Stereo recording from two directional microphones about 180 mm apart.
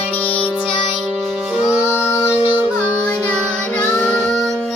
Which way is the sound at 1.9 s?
15° left (ahead or behind).